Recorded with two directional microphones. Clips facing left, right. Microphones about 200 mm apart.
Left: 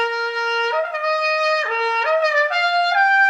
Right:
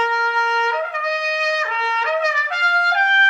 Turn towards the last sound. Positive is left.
turn(degrees=35)  # may be behind; listen again after turning